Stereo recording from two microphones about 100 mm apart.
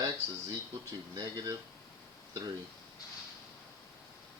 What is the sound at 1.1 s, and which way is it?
Speech, 40° right (ahead or behind).